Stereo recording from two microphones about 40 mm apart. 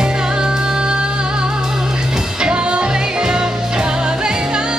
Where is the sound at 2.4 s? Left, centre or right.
Right.